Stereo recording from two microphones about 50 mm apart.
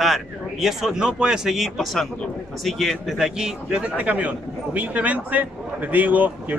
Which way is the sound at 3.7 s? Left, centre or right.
Right.